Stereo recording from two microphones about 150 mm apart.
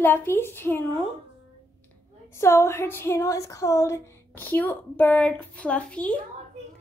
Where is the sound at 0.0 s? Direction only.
15° left (ahead or behind).